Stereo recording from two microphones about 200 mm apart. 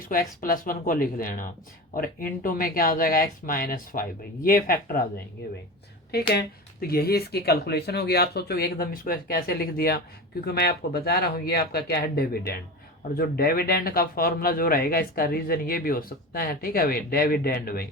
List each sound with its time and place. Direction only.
0.1 s speech: 45° left (ahead or behind)
6.8 s speech: 50° left (ahead or behind)